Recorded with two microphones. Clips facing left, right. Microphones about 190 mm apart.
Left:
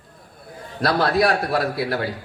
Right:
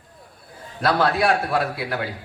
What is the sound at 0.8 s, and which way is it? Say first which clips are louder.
A man's voice: left 1 dB; 40° left (ahead or behind).